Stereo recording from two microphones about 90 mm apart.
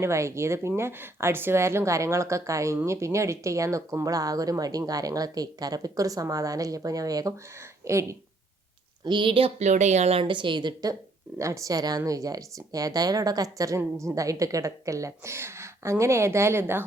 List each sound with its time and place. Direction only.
0.0 s speech: 30° right (ahead or behind)
9.0 s a woman's voice: 65° right (ahead or behind)
11.3 s speech: 35° right (ahead or behind)